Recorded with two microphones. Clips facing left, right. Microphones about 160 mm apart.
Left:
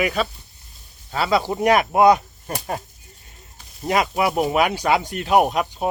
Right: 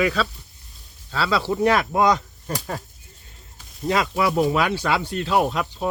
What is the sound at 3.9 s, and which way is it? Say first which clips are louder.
Speech: left 1 dB; 15° left (ahead or behind).